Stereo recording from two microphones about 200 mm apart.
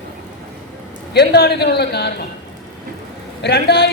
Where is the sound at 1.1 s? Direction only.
55° left (ahead or behind).